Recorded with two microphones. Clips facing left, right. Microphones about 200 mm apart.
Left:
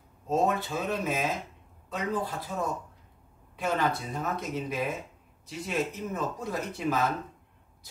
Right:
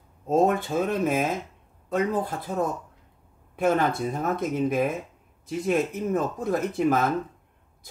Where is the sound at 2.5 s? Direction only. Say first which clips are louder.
Right 8 dB; 45° right (ahead or behind).